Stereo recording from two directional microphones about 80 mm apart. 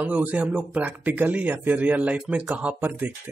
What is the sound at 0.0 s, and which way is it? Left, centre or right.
Speech, right.